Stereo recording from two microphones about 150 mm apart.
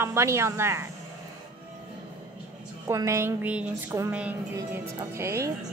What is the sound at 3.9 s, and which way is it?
Speech, 20° right (ahead or behind).